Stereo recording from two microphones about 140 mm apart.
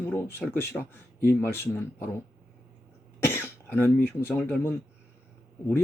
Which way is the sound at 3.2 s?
15° left (ahead or behind).